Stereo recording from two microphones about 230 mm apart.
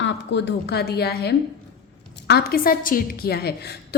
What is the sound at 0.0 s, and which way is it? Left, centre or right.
A woman's voice, left.